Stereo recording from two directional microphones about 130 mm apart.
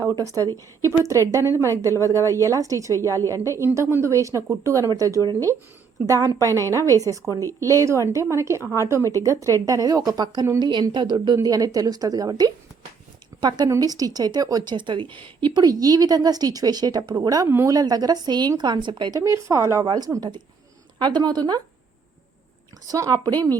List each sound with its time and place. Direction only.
0.1 s a woman's voice: 25° right (ahead or behind)
19.2 s a woman's voice: 25° right (ahead or behind)
22.9 s a woman's voice: 30° right (ahead or behind)